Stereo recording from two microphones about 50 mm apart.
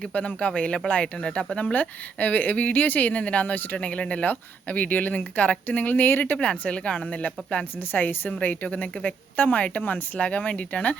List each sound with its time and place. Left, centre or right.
0.1 s speech: left
3.8 s speech: left
6.4 s speech: left